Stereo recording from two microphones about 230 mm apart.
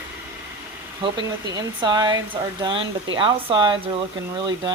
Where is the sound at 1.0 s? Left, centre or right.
Right.